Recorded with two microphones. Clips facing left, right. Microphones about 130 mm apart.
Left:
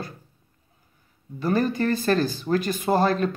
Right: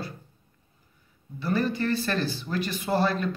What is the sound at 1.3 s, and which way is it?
Speech, 45° left (ahead or behind).